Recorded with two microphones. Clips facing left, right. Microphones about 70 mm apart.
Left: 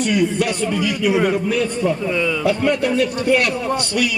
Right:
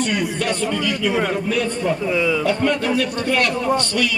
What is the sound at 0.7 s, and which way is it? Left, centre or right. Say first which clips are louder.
Speech: left 2 dB; centre.